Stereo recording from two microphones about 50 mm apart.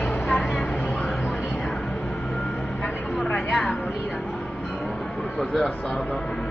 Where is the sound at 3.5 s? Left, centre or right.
Left.